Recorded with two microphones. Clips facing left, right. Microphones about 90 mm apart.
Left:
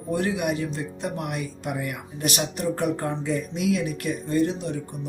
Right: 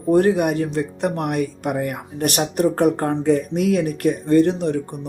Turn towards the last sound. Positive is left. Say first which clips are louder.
# right 8 dB
turn(degrees=-60)  # may be behind; listen again after turning